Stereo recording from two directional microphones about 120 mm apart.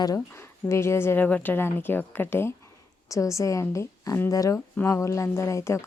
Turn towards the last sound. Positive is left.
turn(degrees=25)  # may be behind; listen again after turning